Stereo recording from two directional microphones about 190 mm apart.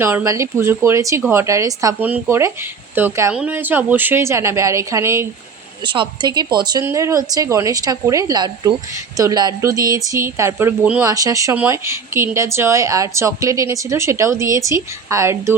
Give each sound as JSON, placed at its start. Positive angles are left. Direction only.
{"t": 0.0, "sound": "speech", "side_deg": -15}
{"t": 5.8, "sound": "speech", "side_deg": -25}